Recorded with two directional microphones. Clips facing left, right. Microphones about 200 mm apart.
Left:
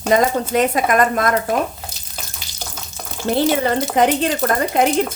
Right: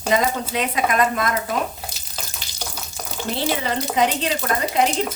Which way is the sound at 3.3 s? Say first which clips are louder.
Left 7 dB; 50° left (ahead or behind).